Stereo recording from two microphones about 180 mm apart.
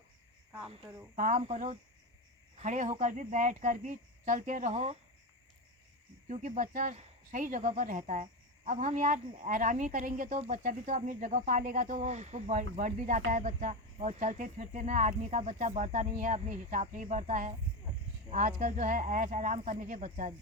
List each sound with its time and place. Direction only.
1.1 s cricket: 45° right (ahead or behind)
2.6 s speech: 40° right (ahead or behind)
6.2 s speech: 40° right (ahead or behind)